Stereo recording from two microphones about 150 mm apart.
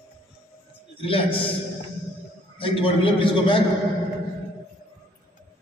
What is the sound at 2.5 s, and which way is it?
A man's voice, 35° left (ahead or behind).